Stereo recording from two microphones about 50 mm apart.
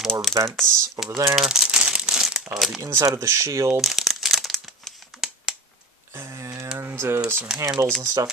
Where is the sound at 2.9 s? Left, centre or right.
Right.